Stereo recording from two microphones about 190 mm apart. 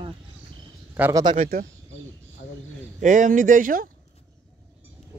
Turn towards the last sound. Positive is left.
turn(degrees=-45)  # may be behind; listen again after turning